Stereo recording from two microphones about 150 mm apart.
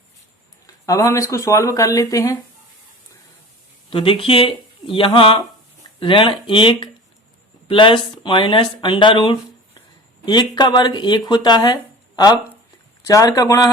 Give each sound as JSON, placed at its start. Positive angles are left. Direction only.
{"t": 0.9, "sound": "speech", "side_deg": 20}
{"t": 3.8, "sound": "speech", "side_deg": 35}